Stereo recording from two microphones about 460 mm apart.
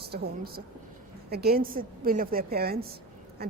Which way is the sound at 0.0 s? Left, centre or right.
Right.